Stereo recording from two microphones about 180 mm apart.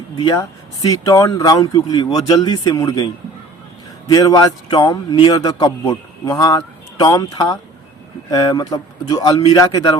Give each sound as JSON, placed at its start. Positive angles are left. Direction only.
{"t": 0.2, "sound": "a man's voice", "side_deg": 20}